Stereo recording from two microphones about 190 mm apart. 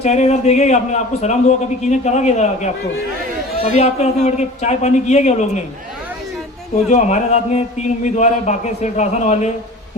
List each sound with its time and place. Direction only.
0.0 s a man's voice: 35° left (ahead or behind)
6.9 s a man's voice: 35° left (ahead or behind)